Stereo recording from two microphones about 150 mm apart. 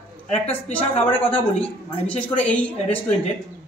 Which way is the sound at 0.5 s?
10° left (ahead or behind).